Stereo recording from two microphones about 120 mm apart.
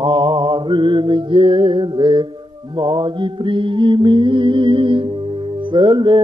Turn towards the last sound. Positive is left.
turn(degrees=-40)  # may be behind; listen again after turning